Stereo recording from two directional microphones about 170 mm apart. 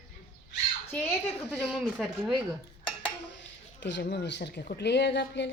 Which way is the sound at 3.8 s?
85° left.